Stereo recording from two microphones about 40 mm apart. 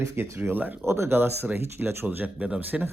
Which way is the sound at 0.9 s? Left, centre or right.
Right.